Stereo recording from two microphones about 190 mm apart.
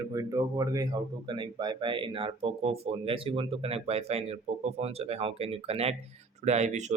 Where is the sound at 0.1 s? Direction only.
15° right (ahead or behind).